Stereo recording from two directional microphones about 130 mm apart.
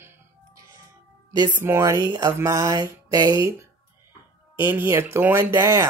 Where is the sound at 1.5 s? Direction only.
20° right (ahead or behind).